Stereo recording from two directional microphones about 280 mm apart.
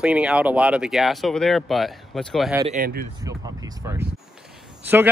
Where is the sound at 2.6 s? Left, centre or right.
Right.